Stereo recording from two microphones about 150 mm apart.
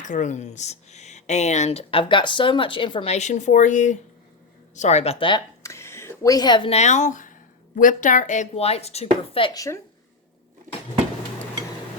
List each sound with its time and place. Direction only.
0.0 s speech: 55° left (ahead or behind)
5.6 s a sound: 20° left (ahead or behind)
6.7 s speech: 50° left (ahead or behind)
9.5 s a woman's voice: 20° left (ahead or behind)